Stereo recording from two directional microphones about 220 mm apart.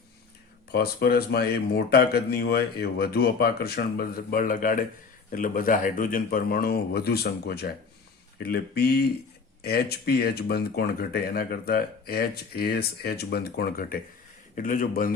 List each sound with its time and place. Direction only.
0.7 s speech: 45° left (ahead or behind)